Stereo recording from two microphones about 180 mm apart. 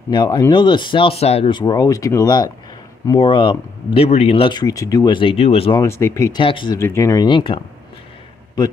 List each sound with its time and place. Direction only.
0.1 s speech: 20° left (ahead or behind)
5.8 s speech: 15° left (ahead or behind)
6.4 s speech: 30° left (ahead or behind)
6.8 s speech: 15° left (ahead or behind)